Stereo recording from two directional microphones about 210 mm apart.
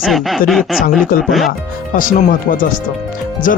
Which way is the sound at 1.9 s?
40° left (ahead or behind).